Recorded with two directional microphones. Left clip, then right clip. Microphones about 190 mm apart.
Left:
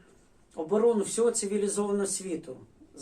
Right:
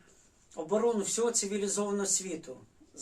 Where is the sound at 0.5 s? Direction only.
15° right (ahead or behind).